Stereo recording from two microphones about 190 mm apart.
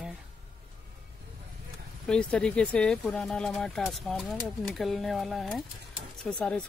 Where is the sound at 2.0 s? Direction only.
5° left (ahead or behind).